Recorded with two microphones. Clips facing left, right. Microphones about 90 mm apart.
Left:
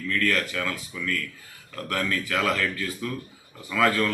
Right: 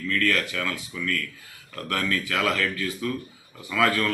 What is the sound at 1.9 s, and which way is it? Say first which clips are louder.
Speech: even; 20° left (ahead or behind).